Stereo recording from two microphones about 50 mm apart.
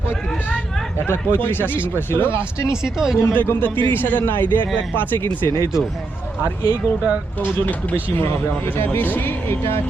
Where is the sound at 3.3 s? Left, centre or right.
Left.